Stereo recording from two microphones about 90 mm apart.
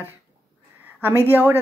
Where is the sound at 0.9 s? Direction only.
25° right (ahead or behind).